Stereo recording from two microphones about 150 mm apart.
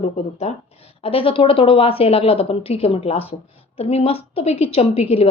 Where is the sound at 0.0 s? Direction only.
45° left (ahead or behind).